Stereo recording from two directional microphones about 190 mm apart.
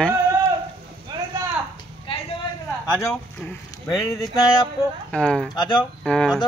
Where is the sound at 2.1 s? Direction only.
30° left (ahead or behind).